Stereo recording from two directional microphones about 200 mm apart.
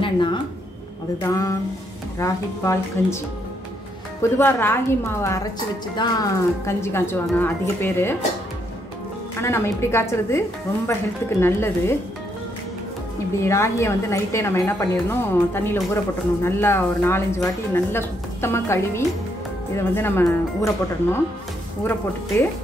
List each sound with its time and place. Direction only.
0.0 s a woman's voice: 25° left (ahead or behind)
4.2 s a woman's voice: 10° left (ahead or behind)
9.4 s a woman's voice: 15° left (ahead or behind)
13.4 s a woman's voice: 15° left (ahead or behind)